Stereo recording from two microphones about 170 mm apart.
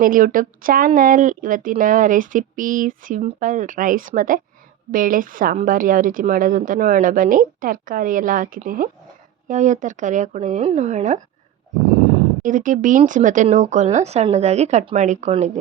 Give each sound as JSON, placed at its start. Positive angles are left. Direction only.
{"t": 0.0, "sound": "a woman's voice", "side_deg": -55}
{"t": 12.4, "sound": "a woman's voice", "side_deg": -50}